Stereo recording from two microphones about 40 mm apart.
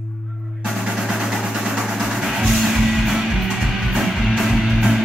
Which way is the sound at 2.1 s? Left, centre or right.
Centre.